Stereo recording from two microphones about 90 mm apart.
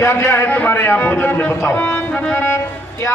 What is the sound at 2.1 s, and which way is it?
Music, 15° left (ahead or behind).